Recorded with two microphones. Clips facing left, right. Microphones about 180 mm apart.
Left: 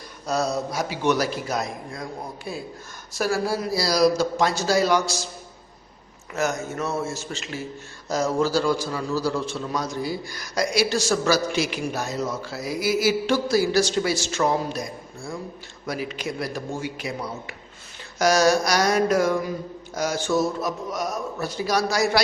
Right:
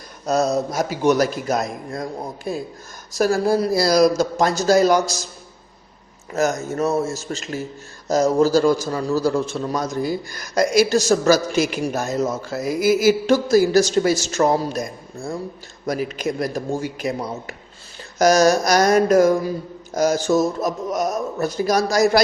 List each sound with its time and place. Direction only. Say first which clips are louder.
0.3 s a man's voice: right 5 dB; 45° right (ahead or behind)
6.3 s a man's voice: right 5 dB; 40° right (ahead or behind)